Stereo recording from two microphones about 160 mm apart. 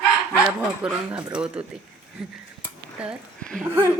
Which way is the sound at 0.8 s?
5° right (ahead or behind).